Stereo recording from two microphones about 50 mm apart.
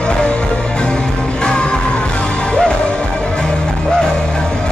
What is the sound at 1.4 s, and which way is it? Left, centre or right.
Music, centre.